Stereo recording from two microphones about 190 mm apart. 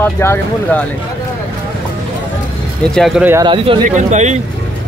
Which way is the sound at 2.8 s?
Centre (ahead or behind).